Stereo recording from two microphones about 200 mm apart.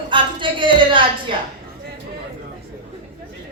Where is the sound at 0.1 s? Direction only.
25° right (ahead or behind).